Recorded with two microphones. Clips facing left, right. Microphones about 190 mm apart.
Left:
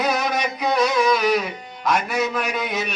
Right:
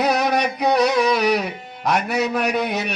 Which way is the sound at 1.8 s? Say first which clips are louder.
Right 1 dB; 65° right (ahead or behind).